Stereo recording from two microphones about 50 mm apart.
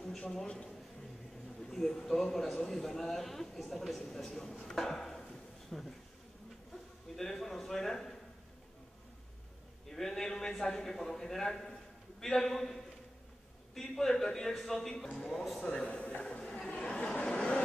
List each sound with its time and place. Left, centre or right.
0.5 s a man's voice: centre
1.6 s a man's voice: centre
7.2 s a sound: centre
9.8 s a man's voice: centre
16.3 s chatter: centre
17.2 s vehicle: left